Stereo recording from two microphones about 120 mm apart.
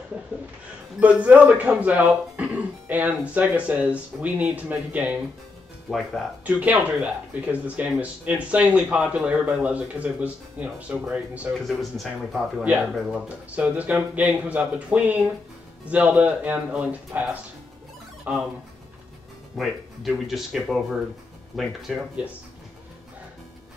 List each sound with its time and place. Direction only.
0.9 s speech: 10° right (ahead or behind)
5.9 s speech: centre (ahead or behind)
6.4 s speech: 10° right (ahead or behind)
11.6 s speech: centre (ahead or behind)
19.5 s speech: centre (ahead or behind)